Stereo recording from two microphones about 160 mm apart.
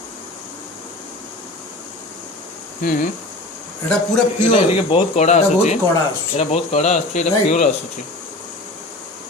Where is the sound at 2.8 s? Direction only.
60° left (ahead or behind).